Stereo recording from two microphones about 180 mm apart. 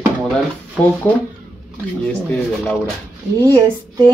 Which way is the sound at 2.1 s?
10° left (ahead or behind).